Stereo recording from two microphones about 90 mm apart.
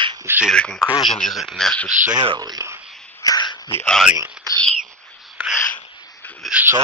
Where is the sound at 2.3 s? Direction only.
50° right (ahead or behind).